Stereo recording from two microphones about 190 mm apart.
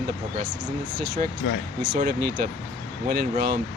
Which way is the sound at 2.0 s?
50° right (ahead or behind).